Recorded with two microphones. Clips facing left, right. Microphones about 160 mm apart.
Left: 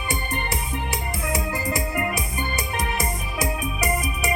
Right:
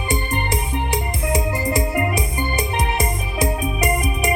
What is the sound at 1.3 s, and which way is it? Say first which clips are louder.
Music: right 5 dB; 30° right (ahead or behind).